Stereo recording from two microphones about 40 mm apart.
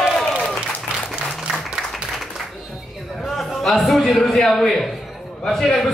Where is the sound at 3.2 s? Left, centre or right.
Centre.